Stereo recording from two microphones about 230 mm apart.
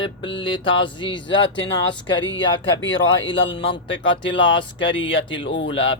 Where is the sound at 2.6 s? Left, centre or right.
Left.